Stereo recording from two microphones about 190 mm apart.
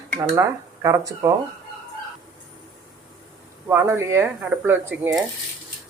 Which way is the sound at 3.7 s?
10° right (ahead or behind).